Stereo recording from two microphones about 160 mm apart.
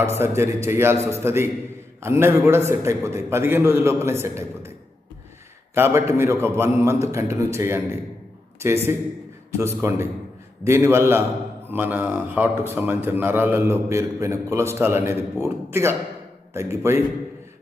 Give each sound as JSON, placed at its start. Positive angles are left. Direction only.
{"t": 0.0, "sound": "a man's voice", "side_deg": -15}
{"t": 5.7, "sound": "a man's voice", "side_deg": -15}